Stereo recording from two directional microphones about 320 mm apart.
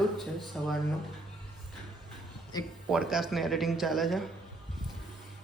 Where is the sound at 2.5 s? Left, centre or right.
Centre.